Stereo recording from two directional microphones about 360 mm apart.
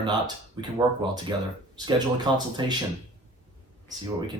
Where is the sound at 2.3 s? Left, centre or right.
Centre.